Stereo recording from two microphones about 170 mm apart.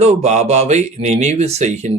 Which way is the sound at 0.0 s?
40° right (ahead or behind).